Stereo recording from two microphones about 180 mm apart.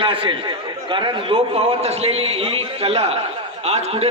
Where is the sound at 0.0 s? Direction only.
30° right (ahead or behind).